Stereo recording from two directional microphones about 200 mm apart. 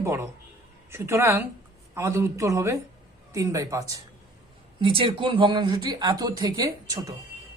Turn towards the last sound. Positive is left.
turn(degrees=-20)  # may be behind; listen again after turning